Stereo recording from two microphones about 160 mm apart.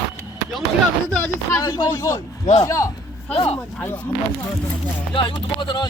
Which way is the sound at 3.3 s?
35° left (ahead or behind).